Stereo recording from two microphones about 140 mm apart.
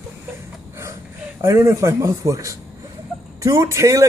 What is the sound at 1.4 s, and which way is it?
A woman's voice, 20° right (ahead or behind).